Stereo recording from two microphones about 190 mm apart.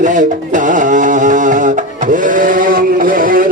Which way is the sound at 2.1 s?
45° right (ahead or behind).